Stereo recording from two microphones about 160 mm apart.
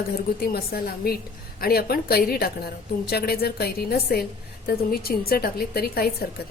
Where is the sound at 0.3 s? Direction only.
70° left (ahead or behind).